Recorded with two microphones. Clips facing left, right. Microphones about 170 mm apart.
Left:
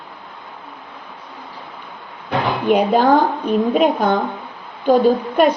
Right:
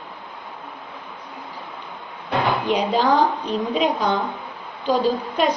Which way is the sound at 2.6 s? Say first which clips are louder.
Left 10 dB; 55° left (ahead or behind).